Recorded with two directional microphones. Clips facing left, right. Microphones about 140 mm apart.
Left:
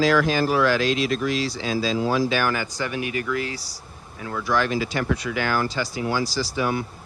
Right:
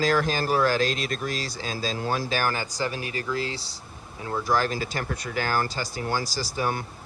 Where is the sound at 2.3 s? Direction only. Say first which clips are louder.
Left 3 dB; 40° right (ahead or behind).